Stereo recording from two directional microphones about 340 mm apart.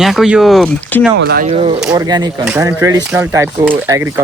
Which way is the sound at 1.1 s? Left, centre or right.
Right.